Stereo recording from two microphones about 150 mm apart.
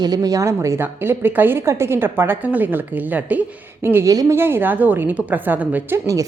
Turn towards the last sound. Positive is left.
turn(degrees=-20)  # may be behind; listen again after turning